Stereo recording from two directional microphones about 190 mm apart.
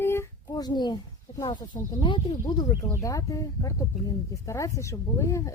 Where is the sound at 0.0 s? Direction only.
10° left (ahead or behind).